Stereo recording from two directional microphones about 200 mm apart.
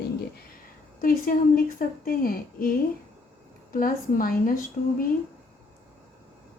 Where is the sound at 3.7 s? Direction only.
45° left (ahead or behind).